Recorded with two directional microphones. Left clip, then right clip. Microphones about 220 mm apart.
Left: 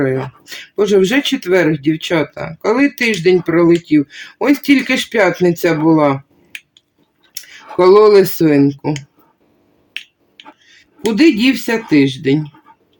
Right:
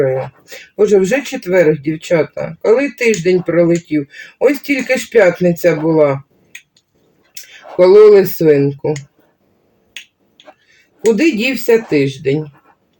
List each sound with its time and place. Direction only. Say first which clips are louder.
0.0 s speech: right 2 dB; 50° left (ahead or behind)
7.8 s speech: right 2 dB; 50° left (ahead or behind)
11.2 s speech: left 3 dB; 50° left (ahead or behind)